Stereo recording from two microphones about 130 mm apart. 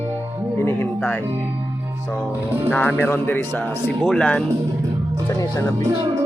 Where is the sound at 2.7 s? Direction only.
10° left (ahead or behind).